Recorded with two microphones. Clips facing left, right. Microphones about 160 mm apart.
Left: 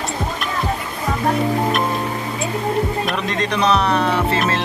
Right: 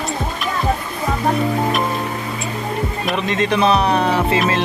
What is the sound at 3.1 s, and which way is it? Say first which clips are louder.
Speech: right 3 dB; centre (ahead or behind).